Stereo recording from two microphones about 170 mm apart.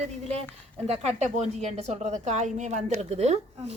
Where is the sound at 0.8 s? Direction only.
35° right (ahead or behind).